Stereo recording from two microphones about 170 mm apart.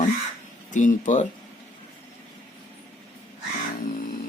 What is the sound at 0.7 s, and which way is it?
Speech, 45° left (ahead or behind).